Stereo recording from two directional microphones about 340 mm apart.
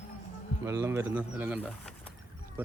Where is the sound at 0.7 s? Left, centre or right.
Centre.